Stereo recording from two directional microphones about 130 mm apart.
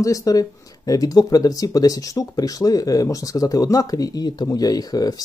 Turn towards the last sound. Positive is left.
turn(degrees=30)  # may be behind; listen again after turning